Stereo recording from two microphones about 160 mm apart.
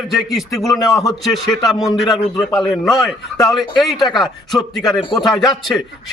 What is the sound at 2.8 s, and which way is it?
A man's voice, centre (ahead or behind).